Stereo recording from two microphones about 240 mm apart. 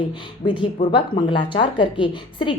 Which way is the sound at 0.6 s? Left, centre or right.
Centre.